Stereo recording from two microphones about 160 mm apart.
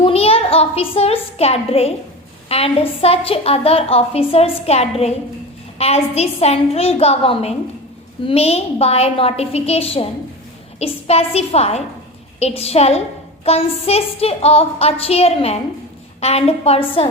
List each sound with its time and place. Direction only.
0.0 s a child's voice: 40° left (ahead or behind)